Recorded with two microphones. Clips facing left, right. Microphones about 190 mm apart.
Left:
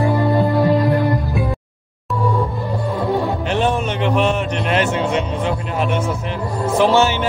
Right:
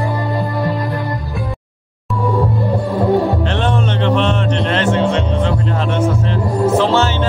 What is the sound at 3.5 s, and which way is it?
Music, 10° left (ahead or behind).